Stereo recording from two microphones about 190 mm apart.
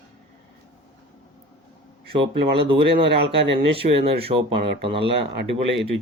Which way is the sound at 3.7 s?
30° right (ahead or behind).